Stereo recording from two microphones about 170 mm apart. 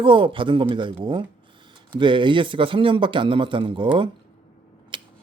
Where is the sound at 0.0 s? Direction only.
30° right (ahead or behind).